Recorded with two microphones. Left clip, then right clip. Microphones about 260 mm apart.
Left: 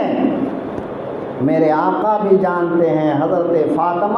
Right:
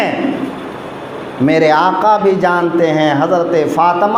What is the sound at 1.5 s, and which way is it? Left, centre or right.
A man's voice, right.